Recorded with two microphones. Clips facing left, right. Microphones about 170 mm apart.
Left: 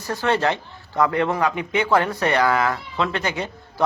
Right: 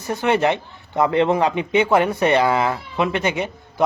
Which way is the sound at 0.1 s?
20° right (ahead or behind).